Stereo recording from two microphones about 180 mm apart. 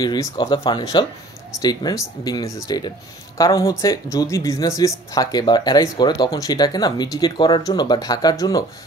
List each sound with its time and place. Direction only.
0.0 s speech: 20° left (ahead or behind)